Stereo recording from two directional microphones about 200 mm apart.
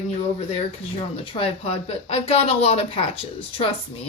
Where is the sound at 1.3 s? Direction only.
25° left (ahead or behind).